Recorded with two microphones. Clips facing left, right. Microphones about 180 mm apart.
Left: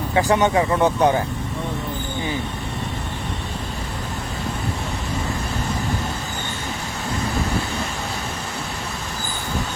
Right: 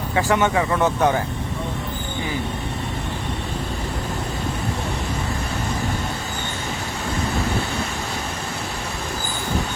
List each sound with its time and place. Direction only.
0.1 s speech: 20° left (ahead or behind)